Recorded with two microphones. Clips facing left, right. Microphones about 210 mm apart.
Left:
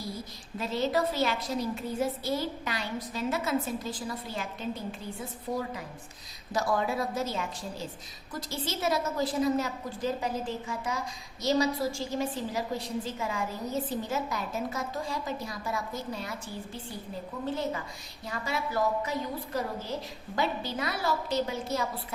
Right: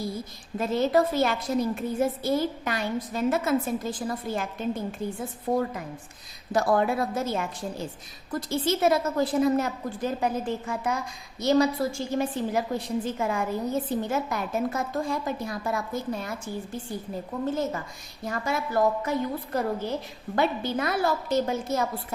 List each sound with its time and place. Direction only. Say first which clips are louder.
0.6 s a woman's voice: right 5 dB; 50° right (ahead or behind)
20.3 s a woman's voice: right 5 dB; 55° right (ahead or behind)